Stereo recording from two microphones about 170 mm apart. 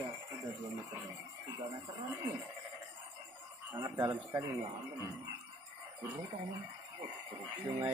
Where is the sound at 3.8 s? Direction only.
25° right (ahead or behind).